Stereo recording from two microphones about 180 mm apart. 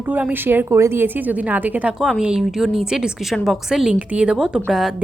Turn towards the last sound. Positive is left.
turn(degrees=0)  # may be behind; listen again after turning